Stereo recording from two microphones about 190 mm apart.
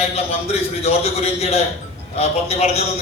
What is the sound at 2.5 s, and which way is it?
Speech, 35° left (ahead or behind).